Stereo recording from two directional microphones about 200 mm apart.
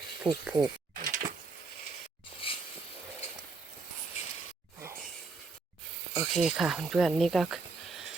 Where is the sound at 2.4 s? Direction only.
25° left (ahead or behind).